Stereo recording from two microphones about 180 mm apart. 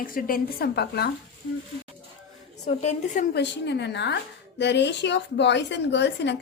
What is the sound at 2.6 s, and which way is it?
Speech, 40° left (ahead or behind).